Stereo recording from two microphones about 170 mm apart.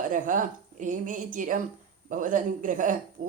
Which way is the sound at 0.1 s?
50° right (ahead or behind).